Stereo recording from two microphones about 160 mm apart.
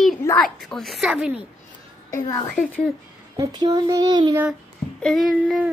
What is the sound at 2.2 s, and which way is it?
Speech, 25° left (ahead or behind).